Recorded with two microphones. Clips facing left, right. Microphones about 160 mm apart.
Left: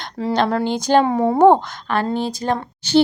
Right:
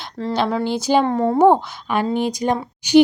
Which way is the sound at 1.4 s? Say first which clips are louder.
Left 2 dB; 5° right (ahead or behind).